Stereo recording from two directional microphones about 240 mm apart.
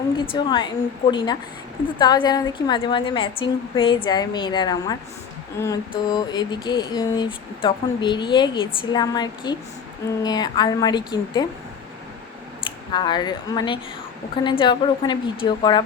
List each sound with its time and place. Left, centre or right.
0.3 s mantra: centre
1.1 s a woman's voice: centre
2.0 s mantra: centre
10.2 s a woman's voice: centre
12.9 s a woman's voice: centre
14.4 s mantra: centre